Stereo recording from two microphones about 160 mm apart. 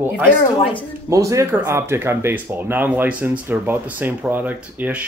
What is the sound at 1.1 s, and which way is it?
Speech, 20° right (ahead or behind).